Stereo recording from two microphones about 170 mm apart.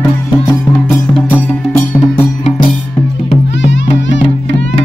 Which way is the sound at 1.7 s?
10° left (ahead or behind).